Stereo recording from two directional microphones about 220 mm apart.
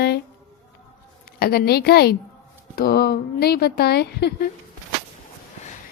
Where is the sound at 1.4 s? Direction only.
45° left (ahead or behind).